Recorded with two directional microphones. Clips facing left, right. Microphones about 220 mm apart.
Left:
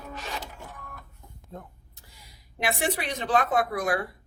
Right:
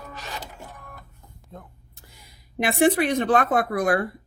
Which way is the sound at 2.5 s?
55° right (ahead or behind).